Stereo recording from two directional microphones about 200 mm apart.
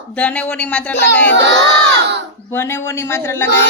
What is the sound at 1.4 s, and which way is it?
Crowd, 60° right (ahead or behind).